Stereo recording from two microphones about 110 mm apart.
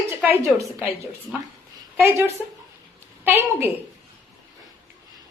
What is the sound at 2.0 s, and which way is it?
Speech, 25° right (ahead or behind).